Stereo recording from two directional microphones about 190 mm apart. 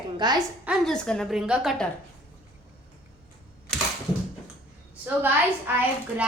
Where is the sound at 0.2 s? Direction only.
25° right (ahead or behind).